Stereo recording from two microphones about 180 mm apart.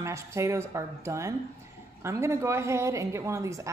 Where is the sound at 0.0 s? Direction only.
15° right (ahead or behind).